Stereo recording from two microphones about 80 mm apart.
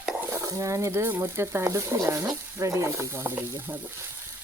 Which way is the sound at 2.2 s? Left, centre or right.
Right.